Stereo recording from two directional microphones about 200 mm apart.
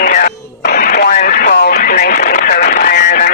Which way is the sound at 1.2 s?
50° left (ahead or behind).